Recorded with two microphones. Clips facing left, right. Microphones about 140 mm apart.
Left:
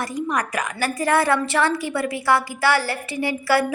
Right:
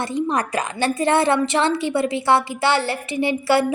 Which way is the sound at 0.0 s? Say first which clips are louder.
Right 3 dB; 25° right (ahead or behind).